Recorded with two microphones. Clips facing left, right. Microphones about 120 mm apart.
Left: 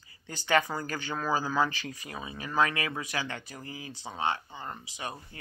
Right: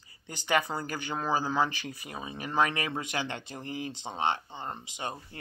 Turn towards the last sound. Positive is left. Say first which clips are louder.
# right 2 dB
turn(degrees=-20)  # may be behind; listen again after turning